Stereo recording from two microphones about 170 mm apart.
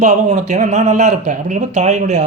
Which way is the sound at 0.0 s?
45° right (ahead or behind).